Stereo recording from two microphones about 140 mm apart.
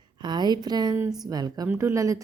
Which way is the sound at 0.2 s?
30° right (ahead or behind).